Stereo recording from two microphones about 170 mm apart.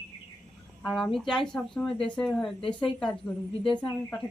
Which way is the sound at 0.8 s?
Centre (ahead or behind).